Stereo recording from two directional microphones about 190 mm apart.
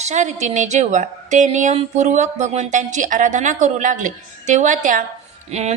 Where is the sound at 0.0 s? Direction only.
40° right (ahead or behind).